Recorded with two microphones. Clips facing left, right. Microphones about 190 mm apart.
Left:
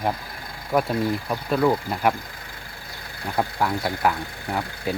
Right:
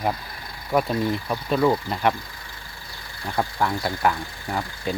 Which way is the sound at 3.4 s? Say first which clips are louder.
Even; 5° left (ahead or behind).